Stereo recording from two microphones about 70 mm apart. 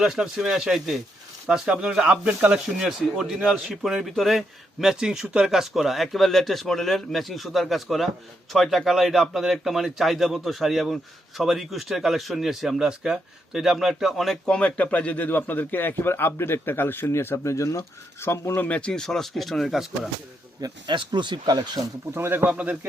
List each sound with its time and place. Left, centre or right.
0.0 s a man's voice: centre
2.6 s a man's voice: centre
14.4 s speech: centre
18.8 s a man's voice: centre
20.6 s speech: right
22.1 s speech: right
22.4 s speech: centre